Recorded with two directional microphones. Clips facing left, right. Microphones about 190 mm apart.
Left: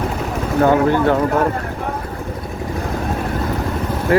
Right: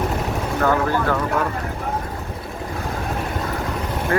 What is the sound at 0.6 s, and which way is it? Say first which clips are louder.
Speech: left 6 dB; 20° left (ahead or behind).